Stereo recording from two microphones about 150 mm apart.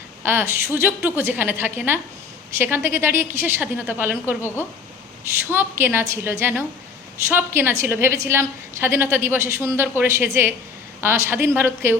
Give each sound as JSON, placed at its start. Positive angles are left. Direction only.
{"t": 0.2, "sound": "a woman's voice", "side_deg": -15}
{"t": 5.5, "sound": "a woman's voice", "side_deg": -15}